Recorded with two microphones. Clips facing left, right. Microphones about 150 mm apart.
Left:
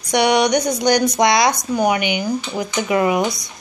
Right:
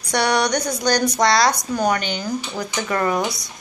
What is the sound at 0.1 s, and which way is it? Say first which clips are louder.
Speech: left 4 dB; 15° left (ahead or behind).